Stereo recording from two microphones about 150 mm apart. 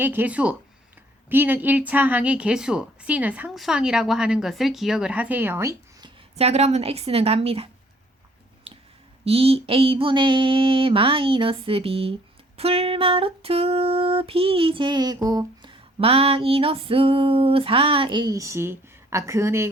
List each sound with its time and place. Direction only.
0.0 s a woman's voice: 10° right (ahead or behind)
6.3 s a woman's voice: 45° right (ahead or behind)
9.2 s female singing: 40° right (ahead or behind); by 15.7 s 25° right (ahead or behind)
15.7 s female singing: 40° right (ahead or behind); by 19.7 s 15° right (ahead or behind)